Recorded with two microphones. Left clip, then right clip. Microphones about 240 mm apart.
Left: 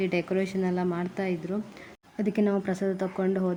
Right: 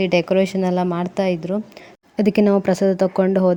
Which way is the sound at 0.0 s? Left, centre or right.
Right.